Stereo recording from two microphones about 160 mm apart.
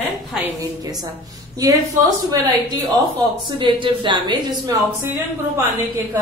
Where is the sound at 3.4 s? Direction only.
30° right (ahead or behind).